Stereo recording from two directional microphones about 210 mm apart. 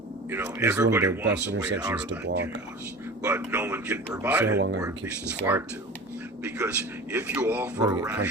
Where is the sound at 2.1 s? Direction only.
60° right (ahead or behind).